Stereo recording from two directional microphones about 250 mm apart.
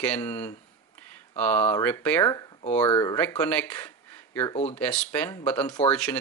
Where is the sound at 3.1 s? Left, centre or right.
Centre.